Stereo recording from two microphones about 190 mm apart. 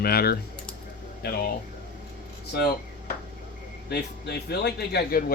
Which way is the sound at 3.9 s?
55° left (ahead or behind).